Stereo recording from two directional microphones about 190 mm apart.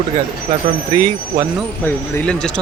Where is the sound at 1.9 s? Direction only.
10° left (ahead or behind).